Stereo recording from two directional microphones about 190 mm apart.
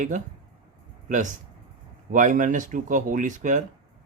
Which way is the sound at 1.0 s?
40° right (ahead or behind).